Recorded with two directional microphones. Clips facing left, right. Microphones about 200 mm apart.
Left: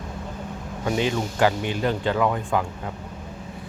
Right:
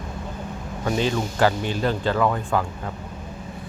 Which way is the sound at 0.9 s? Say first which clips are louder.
Right 1 dB; 15° left (ahead or behind).